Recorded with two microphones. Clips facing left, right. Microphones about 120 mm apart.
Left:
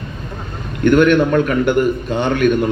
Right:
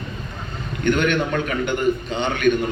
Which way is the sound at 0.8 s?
50° left (ahead or behind).